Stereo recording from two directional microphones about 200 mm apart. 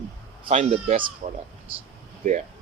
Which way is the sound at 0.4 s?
35° right (ahead or behind).